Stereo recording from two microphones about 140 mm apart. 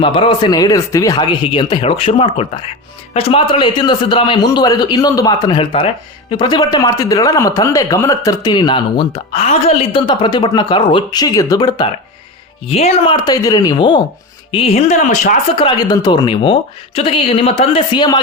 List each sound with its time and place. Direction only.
0.0 s a man's voice: 35° left (ahead or behind)
10.1 s a man's voice: 30° left (ahead or behind)
12.6 s speech: 45° left (ahead or behind)
13.1 s speech: 30° left (ahead or behind)
14.5 s speech: 45° left (ahead or behind); by 15.4 s 60° left (ahead or behind)
15.5 s a man's voice: 35° left (ahead or behind)